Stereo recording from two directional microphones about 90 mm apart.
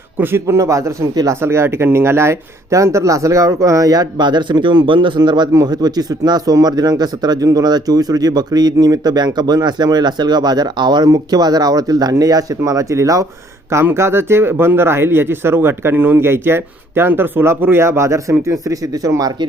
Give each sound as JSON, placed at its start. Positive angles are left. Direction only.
{"t": 0.2, "sound": "speech", "side_deg": -25}